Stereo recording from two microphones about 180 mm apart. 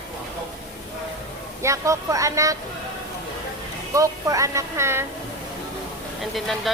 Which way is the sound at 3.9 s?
15° right (ahead or behind).